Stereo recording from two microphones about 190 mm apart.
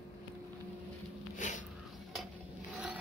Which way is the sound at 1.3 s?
40° left (ahead or behind).